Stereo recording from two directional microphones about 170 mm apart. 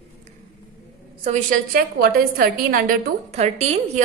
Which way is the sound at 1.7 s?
60° right (ahead or behind).